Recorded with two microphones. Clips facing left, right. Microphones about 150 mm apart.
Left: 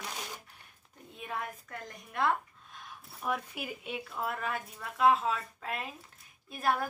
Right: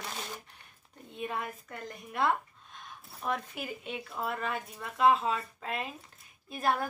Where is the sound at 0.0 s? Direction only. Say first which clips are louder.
Right 1 dB; 10° left (ahead or behind).